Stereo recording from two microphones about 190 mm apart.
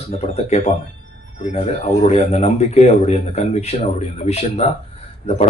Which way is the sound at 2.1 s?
35° left (ahead or behind).